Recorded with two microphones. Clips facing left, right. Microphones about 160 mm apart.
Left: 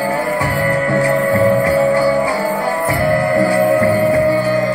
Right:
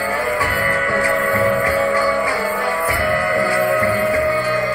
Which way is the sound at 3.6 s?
25° left (ahead or behind).